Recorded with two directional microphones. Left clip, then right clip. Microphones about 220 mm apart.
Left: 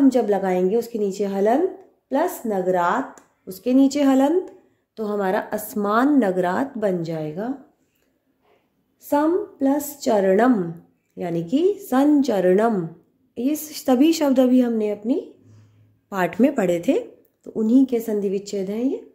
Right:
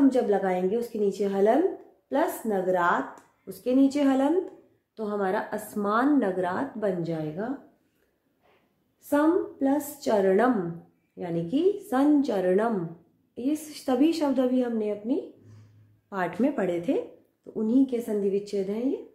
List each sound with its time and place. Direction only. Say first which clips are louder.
0.1 s a woman's voice: left 4 dB; 40° left (ahead or behind)
9.1 s a woman's voice: left 4 dB; 40° left (ahead or behind)